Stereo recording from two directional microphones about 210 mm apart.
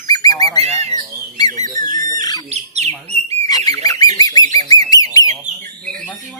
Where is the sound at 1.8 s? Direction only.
40° right (ahead or behind).